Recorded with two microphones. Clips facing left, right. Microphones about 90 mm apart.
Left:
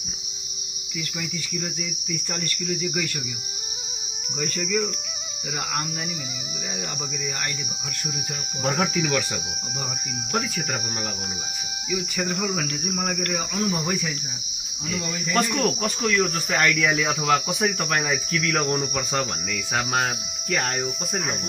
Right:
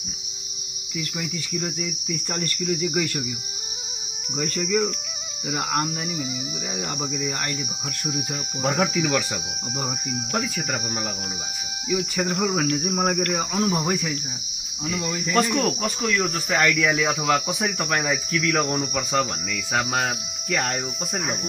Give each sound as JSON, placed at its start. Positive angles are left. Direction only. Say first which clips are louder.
{"t": 4.4, "sound": "cricket", "louder": "right 2 dB", "side_deg": -15}
{"t": 8.6, "sound": "speech", "louder": "right 1 dB", "side_deg": -5}
{"t": 10.3, "sound": "cricket", "louder": "left 1 dB", "side_deg": -5}
{"t": 11.9, "sound": "cricket", "louder": "right 3 dB", "side_deg": -25}
{"t": 14.9, "sound": "speech", "louder": "right 2 dB", "side_deg": -15}